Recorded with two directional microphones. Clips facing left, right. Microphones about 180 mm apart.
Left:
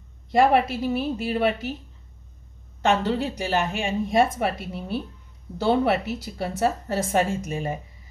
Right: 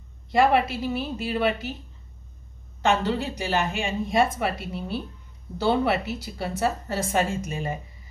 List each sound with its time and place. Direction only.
0.3 s a woman's voice: 45° left (ahead or behind)
2.8 s a woman's voice: 50° left (ahead or behind)